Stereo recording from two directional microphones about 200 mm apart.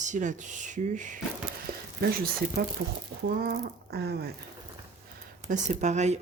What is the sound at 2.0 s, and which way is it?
Speech, 50° right (ahead or behind).